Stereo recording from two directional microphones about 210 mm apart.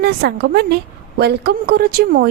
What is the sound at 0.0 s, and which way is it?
A woman's voice, 50° right (ahead or behind).